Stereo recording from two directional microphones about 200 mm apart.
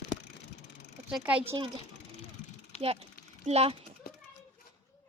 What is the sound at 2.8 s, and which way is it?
Speech, 30° right (ahead or behind).